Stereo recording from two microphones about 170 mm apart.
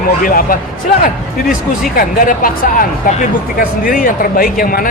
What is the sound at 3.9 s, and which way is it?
Speech, 55° left (ahead or behind).